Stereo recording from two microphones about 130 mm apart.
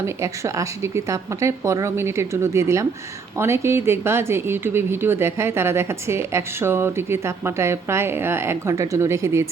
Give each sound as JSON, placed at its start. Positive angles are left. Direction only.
{"t": 0.0, "sound": "speech", "side_deg": -25}